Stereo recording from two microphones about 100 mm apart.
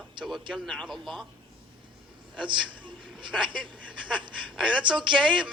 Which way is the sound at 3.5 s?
50° right (ahead or behind).